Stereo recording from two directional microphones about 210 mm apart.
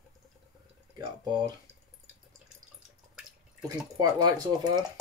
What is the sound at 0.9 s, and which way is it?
Speech, 20° right (ahead or behind).